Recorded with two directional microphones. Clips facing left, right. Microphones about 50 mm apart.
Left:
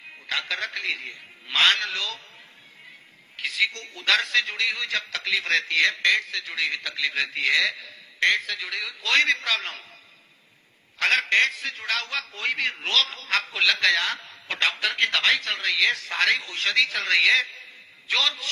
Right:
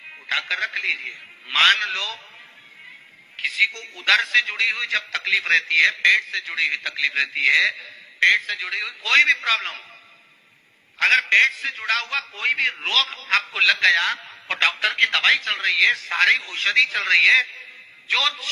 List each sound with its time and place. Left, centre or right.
0.3 s a man's voice: right
1.6 s a man's voice: right
1.9 s a man's voice: right
3.3 s a man's voice: right
11.0 s a man's voice: right
14.3 s a sound: right
14.8 s a man's voice: right
16.0 s a man's voice: right